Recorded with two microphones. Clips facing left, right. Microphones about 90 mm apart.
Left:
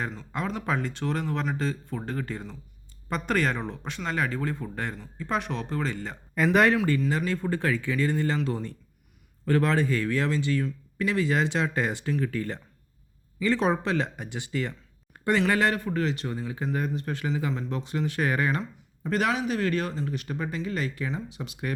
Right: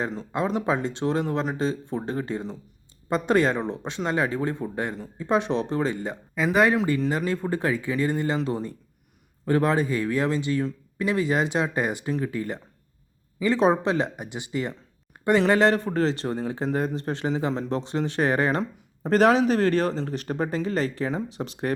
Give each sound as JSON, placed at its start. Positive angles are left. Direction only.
{"t": 0.3, "sound": "speech", "side_deg": -20}
{"t": 6.4, "sound": "speech", "side_deg": -5}
{"t": 6.7, "sound": "speech", "side_deg": -20}